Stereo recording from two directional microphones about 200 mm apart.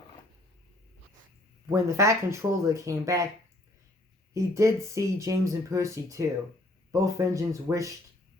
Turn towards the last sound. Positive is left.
turn(degrees=-15)  # may be behind; listen again after turning